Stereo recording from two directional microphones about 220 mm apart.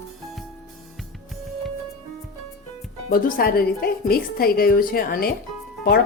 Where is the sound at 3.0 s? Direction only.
45° left (ahead or behind).